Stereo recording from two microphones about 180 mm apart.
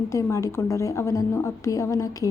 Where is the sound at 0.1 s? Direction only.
15° left (ahead or behind).